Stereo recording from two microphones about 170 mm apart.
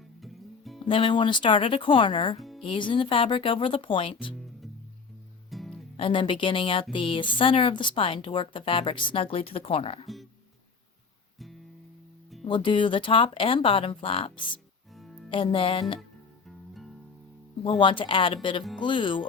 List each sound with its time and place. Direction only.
0.2 s music: centre (ahead or behind)
0.9 s speech: 30° left (ahead or behind)
5.5 s music: centre (ahead or behind)
6.0 s speech: 30° left (ahead or behind)
12.5 s speech: 30° left (ahead or behind)
14.9 s music: centre (ahead or behind)
15.3 s speech: 30° left (ahead or behind)
17.6 s speech: 30° left (ahead or behind)